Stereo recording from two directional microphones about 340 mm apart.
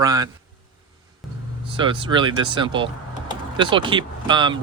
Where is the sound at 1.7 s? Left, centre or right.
Centre.